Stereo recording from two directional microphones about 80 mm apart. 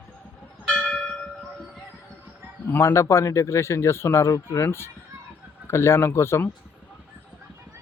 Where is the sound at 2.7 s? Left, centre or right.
Left.